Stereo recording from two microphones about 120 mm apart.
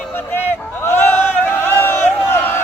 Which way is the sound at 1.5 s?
20° left (ahead or behind).